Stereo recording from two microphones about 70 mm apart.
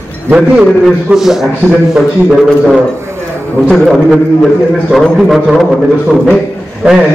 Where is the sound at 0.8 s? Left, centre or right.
Centre.